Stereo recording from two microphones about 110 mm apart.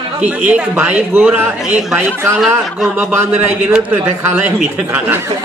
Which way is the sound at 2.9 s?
20° right (ahead or behind).